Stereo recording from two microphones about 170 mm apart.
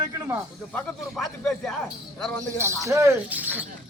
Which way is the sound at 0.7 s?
5° left (ahead or behind).